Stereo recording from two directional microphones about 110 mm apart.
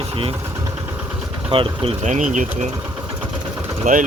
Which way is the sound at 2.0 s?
90° right.